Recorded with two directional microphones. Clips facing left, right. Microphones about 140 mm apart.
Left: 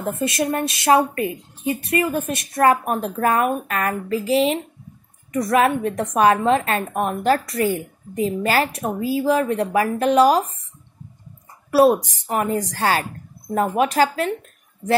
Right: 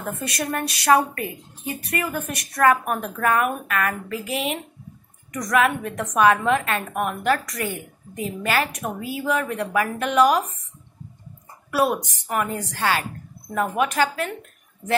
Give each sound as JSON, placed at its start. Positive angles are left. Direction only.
{"t": 0.0, "sound": "a woman's voice", "side_deg": 25}
{"t": 11.7, "sound": "a woman's voice", "side_deg": 35}